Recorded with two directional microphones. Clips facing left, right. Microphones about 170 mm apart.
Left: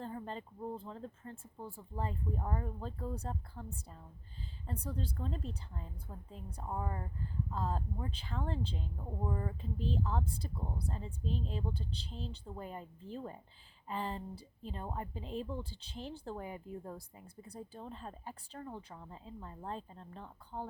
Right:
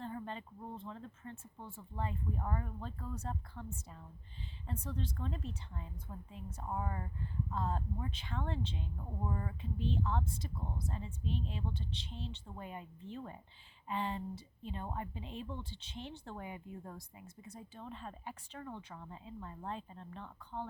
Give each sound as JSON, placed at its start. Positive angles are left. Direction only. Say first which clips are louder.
{"t": 0.0, "sound": "speech", "louder": "left 1 dB", "side_deg": 35}